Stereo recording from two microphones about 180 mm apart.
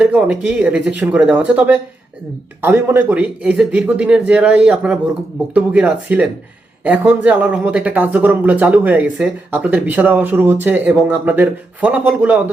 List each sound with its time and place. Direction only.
0.0 s speech: 5° right (ahead or behind)